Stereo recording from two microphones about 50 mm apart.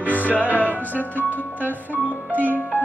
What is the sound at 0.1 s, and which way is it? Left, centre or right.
Music, left.